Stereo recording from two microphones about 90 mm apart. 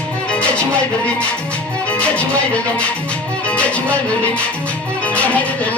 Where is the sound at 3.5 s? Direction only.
15° left (ahead or behind).